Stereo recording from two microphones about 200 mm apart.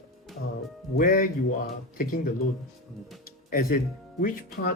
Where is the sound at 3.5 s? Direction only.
45° left (ahead or behind).